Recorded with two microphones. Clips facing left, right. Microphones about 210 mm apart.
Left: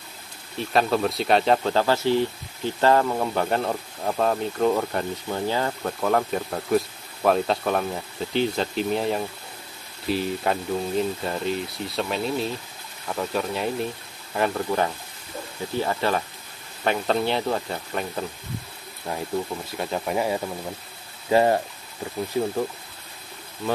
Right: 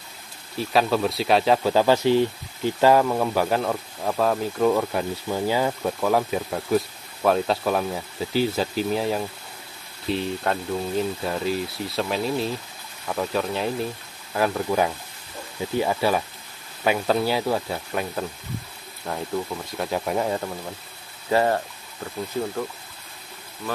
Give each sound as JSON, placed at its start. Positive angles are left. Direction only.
{"t": 0.6, "sound": "speech", "side_deg": 0}
{"t": 21.3, "sound": "speech", "side_deg": 15}